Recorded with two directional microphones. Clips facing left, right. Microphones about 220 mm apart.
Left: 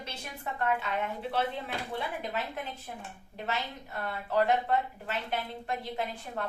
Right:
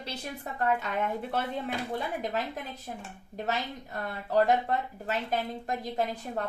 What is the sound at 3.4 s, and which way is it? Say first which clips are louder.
Speech: right 2 dB; 40° right (ahead or behind).